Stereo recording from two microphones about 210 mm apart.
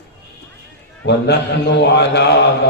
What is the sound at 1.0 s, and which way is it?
A man's voice, 55° left (ahead or behind).